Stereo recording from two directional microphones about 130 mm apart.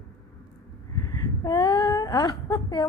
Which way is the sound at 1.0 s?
30° left (ahead or behind).